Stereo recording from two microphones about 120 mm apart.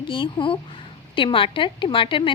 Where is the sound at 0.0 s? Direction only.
45° left (ahead or behind).